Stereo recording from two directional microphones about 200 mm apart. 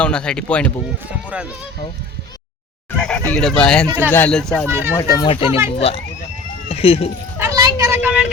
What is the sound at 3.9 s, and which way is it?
Speech, 10° right (ahead or behind).